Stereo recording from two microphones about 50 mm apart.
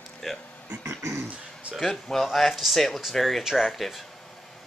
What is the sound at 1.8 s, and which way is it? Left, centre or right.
Speech, centre.